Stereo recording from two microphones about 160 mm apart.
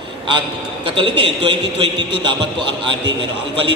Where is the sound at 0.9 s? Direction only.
35° right (ahead or behind).